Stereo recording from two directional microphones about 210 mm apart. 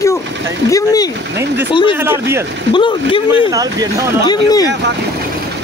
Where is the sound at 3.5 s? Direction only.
15° right (ahead or behind).